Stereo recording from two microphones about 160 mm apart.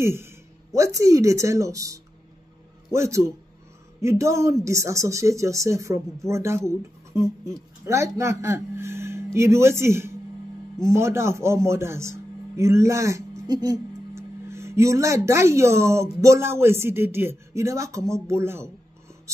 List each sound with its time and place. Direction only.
0.0 s a man's voice: 15° right (ahead or behind)